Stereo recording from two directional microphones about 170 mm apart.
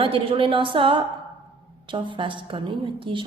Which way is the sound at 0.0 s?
30° right (ahead or behind).